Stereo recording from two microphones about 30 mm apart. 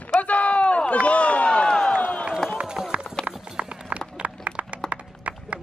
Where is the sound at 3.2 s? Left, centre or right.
Left.